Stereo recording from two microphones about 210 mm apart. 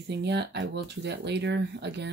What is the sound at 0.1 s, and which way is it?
Speech, 55° right (ahead or behind).